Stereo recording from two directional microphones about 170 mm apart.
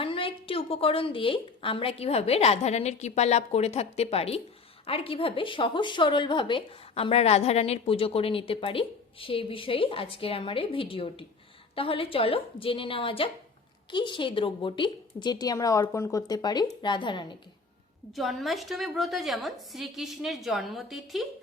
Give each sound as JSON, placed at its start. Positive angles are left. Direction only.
{"t": 0.0, "sound": "a woman's voice", "side_deg": 30}
{"t": 18.1, "sound": "a woman's voice", "side_deg": 0}